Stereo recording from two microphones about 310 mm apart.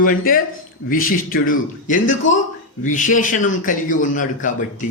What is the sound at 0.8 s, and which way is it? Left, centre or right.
A man's voice, left.